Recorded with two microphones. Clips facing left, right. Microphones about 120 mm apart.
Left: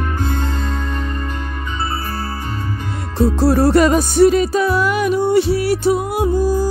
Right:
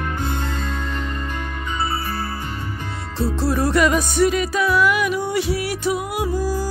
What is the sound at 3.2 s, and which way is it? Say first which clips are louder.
Music: left 7 dB; 40° left (ahead or behind).